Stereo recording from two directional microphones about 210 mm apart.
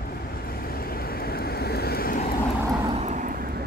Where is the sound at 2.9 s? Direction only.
35° right (ahead or behind).